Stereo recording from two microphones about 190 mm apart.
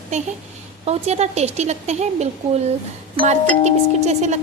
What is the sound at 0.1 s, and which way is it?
A woman's voice, 35° right (ahead or behind).